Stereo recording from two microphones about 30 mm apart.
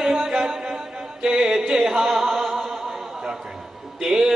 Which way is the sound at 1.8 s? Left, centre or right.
Centre.